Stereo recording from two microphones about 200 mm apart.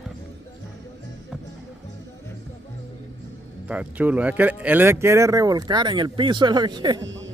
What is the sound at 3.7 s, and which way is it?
Speech, 5° right (ahead or behind).